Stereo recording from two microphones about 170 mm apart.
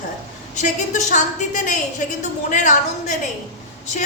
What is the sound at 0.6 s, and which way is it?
A woman's voice, 45° left (ahead or behind).